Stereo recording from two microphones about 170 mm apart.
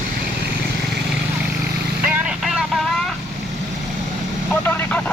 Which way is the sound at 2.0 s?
10° right (ahead or behind).